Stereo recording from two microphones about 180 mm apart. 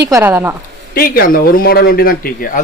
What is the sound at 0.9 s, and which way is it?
Speech, 55° left (ahead or behind).